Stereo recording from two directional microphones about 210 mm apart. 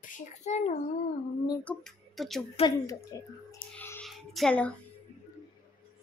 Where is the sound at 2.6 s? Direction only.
15° left (ahead or behind).